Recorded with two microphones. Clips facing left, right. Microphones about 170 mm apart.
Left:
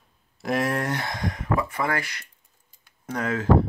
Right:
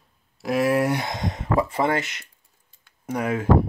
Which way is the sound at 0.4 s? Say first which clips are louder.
Right 4 dB; centre (ahead or behind).